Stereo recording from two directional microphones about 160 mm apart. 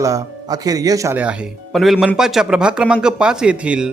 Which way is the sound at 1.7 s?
Centre (ahead or behind).